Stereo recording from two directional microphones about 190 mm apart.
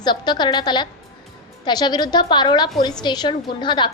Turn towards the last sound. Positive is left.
turn(degrees=25)  # may be behind; listen again after turning